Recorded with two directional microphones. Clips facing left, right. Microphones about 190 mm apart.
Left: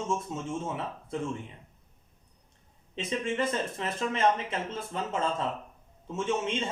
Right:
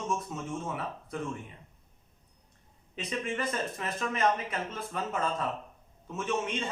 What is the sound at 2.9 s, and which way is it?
Speech, 25° left (ahead or behind).